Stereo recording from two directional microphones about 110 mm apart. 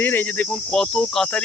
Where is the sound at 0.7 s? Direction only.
5° left (ahead or behind).